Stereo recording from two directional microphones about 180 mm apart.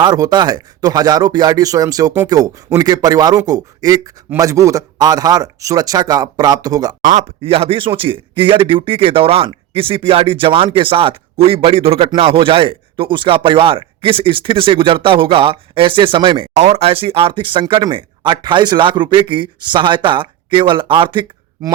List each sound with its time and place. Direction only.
0.0 s speech: 20° right (ahead or behind)
7.0 s speech: 40° right (ahead or behind)